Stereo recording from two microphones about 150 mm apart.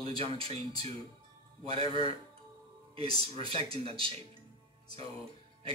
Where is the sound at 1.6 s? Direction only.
40° right (ahead or behind).